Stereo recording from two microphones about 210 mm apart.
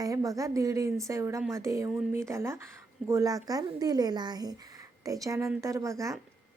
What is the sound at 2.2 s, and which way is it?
A woman's voice, 15° right (ahead or behind).